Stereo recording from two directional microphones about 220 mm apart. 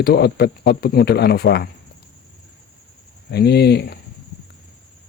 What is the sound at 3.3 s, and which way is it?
Speech, 45° left (ahead or behind).